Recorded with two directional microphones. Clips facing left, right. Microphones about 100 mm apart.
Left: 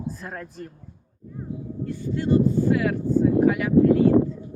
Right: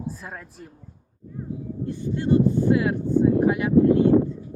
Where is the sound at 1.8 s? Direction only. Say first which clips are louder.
Right 1 dB; 20° right (ahead or behind).